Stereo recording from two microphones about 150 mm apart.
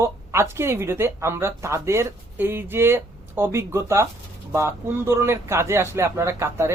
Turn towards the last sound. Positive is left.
turn(degrees=-15)  # may be behind; listen again after turning